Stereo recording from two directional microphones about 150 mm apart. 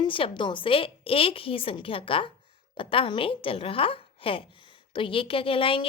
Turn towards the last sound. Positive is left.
turn(degrees=35)  # may be behind; listen again after turning